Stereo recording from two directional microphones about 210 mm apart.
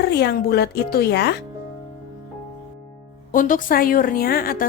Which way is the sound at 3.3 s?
40° left (ahead or behind).